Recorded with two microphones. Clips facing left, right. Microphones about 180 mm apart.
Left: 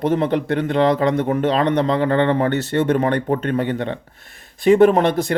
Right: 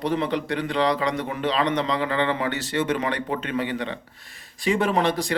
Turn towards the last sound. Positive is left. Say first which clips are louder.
# left 7 dB
turn(degrees=55)  # may be behind; listen again after turning